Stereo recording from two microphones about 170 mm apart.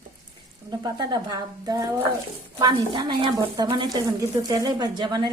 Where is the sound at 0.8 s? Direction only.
25° right (ahead or behind).